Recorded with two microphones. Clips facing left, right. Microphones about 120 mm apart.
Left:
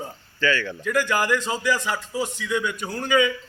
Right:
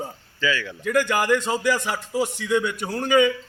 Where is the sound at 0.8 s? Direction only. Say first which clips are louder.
Right 3 dB; 50° right (ahead or behind).